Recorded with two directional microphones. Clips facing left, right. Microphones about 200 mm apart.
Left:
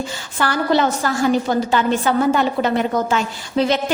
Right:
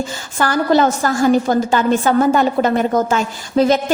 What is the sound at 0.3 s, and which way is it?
A woman's voice, 45° right (ahead or behind).